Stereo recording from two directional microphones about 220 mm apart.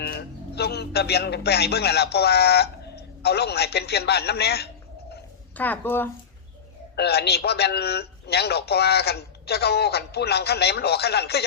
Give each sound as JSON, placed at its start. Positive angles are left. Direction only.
{"t": 0.0, "sound": "a man's voice", "side_deg": 45}
{"t": 5.5, "sound": "speech", "side_deg": 10}
{"t": 6.9, "sound": "a man's voice", "side_deg": 50}